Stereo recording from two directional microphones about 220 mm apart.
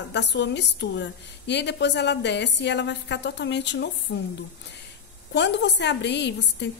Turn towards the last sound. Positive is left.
turn(degrees=50)  # may be behind; listen again after turning